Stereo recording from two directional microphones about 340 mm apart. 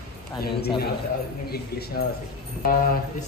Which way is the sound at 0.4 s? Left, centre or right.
Left.